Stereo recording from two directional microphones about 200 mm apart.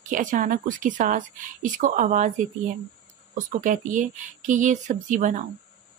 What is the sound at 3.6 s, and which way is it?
Speech, 40° right (ahead or behind).